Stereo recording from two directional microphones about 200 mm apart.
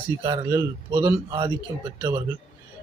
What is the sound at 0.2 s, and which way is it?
Speech, 20° right (ahead or behind).